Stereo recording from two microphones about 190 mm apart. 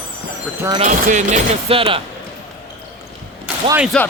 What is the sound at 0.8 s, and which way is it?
Speech, 40° right (ahead or behind).